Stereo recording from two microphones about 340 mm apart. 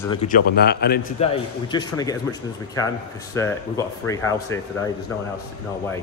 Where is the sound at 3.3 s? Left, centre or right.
Centre.